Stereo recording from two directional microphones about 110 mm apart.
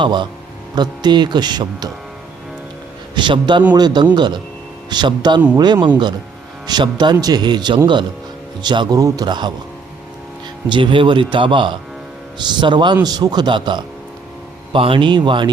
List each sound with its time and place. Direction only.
0.0 s a man's voice: 45° right (ahead or behind)
3.2 s a man's voice: 45° right (ahead or behind)
9.0 s a man's voice: 30° right (ahead or behind)
10.7 s a man's voice: 50° right (ahead or behind)